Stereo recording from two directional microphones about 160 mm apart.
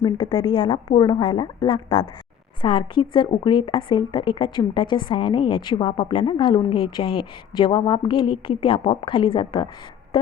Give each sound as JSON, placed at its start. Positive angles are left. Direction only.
{"t": 0.0, "sound": "speech", "side_deg": 30}